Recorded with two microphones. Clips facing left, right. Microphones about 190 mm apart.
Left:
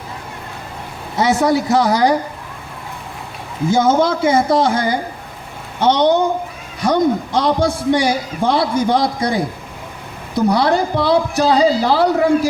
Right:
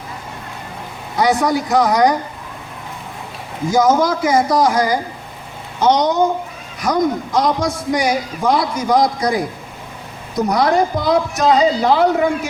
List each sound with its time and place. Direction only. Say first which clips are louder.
1.1 s a man's voice: left 1 dB; 25° left (ahead or behind)
3.7 s a man's voice: even; 25° left (ahead or behind)